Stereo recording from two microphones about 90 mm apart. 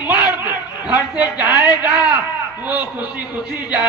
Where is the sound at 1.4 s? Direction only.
20° right (ahead or behind).